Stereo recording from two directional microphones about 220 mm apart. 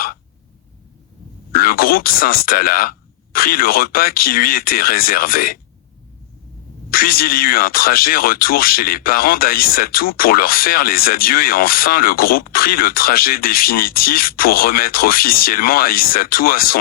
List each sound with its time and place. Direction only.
1.5 s speech: 40° left (ahead or behind)
6.9 s speech: 40° left (ahead or behind)